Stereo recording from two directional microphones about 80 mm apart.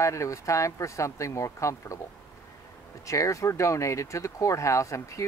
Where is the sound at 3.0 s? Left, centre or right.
Left.